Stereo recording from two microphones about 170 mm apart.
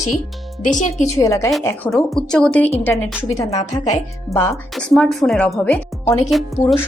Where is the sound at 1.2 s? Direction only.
20° left (ahead or behind).